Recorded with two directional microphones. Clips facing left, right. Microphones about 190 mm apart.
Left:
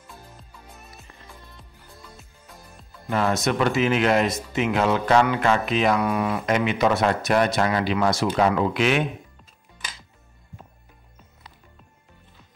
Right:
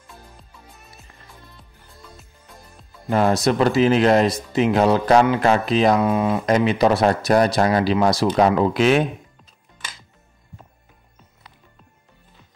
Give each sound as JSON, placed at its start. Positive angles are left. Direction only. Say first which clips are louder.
{"t": 3.1, "sound": "speech", "louder": "right 5 dB", "side_deg": -35}
{"t": 6.4, "sound": "speech", "louder": "right 4 dB", "side_deg": -35}